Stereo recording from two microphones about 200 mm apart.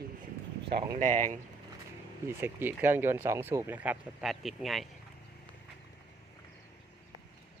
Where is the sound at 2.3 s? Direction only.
10° right (ahead or behind).